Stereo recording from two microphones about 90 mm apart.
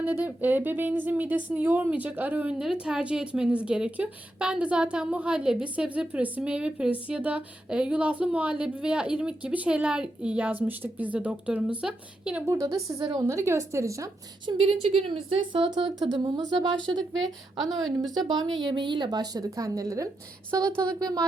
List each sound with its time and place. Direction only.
0.0 s speech: 20° right (ahead or behind)
2.6 s speech: 10° right (ahead or behind)
12.5 s a woman's voice: 35° right (ahead or behind)
14.4 s a woman's voice: 90° right
16.0 s a woman's voice: 60° right (ahead or behind)
17.7 s a woman's voice: centre (ahead or behind)
18.3 s a woman's voice: 50° right (ahead or behind)